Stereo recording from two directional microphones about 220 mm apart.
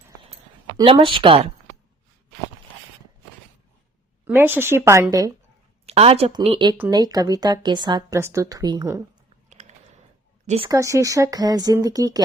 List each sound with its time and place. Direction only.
0.8 s speech: 20° right (ahead or behind)
4.3 s speech: 10° right (ahead or behind)
5.8 s speech: 30° right (ahead or behind)
6.7 s speech: 10° right (ahead or behind)
9.5 s a sound: 30° right (ahead or behind)
10.4 s speech: 30° right (ahead or behind)
10.7 s speech: 15° right (ahead or behind)